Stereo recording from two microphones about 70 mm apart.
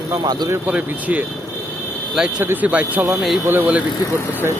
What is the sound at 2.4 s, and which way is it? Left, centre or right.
Speech, right.